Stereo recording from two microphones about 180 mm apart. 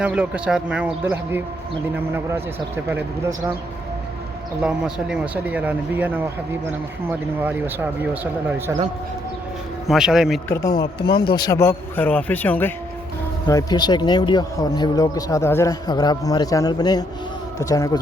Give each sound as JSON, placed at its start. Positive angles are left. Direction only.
{"t": 0.0, "sound": "speech", "side_deg": -5}
{"t": 4.6, "sound": "speech", "side_deg": -5}
{"t": 9.8, "sound": "speech", "side_deg": 0}
{"t": 10.5, "sound": "speech", "side_deg": 15}
{"t": 13.5, "sound": "a man's voice", "side_deg": 20}